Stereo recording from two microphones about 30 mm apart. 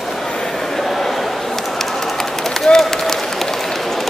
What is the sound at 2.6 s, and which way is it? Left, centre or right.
Applause, centre.